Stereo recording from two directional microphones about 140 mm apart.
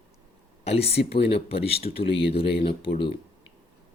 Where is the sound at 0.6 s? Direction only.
45° left (ahead or behind).